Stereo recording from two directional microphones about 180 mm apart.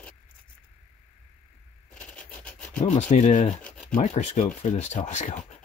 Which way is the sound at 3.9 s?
40° left (ahead or behind).